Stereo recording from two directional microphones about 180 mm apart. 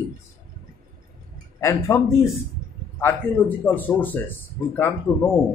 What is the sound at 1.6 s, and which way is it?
Speech, 15° left (ahead or behind).